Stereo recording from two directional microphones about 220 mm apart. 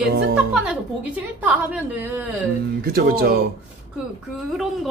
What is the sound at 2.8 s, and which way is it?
Speech, 45° right (ahead or behind).